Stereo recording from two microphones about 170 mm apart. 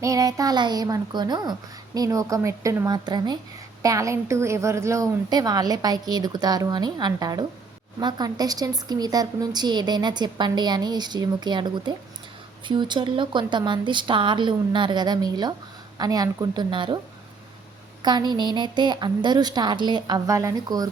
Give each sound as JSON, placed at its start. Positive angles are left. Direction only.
{"t": 0.0, "sound": "a woman's voice", "side_deg": -20}
{"t": 18.0, "sound": "a woman's voice", "side_deg": -25}